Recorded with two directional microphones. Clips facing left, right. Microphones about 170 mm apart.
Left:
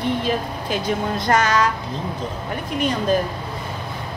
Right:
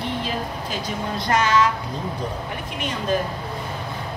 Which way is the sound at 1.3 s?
40° left (ahead or behind).